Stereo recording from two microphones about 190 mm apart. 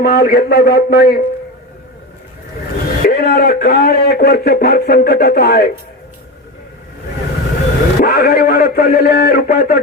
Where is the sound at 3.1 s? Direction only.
55° left (ahead or behind).